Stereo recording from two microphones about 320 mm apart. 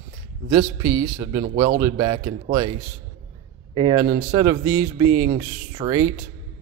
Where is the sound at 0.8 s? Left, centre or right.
Centre.